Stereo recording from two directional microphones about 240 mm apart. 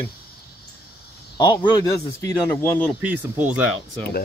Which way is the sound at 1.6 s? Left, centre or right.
Centre.